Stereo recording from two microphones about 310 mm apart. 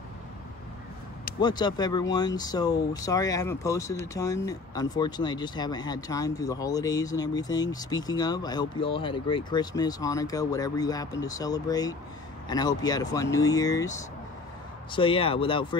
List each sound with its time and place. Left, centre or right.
1.4 s speech: centre